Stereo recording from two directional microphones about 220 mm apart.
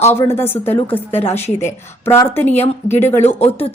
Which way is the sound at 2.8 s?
35° left (ahead or behind).